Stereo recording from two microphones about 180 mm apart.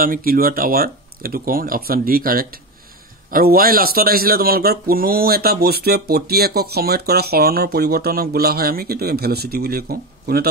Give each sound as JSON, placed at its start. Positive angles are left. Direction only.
{"t": 0.0, "sound": "speech", "side_deg": -55}